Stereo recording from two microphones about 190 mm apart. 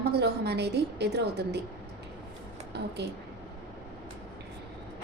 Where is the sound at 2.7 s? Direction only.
60° right (ahead or behind).